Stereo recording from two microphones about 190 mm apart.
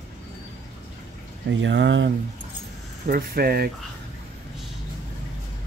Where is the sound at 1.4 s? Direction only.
70° right (ahead or behind).